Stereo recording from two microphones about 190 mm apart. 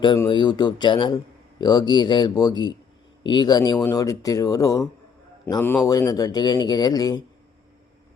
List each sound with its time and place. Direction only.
0.0 s a man's voice: 25° left (ahead or behind)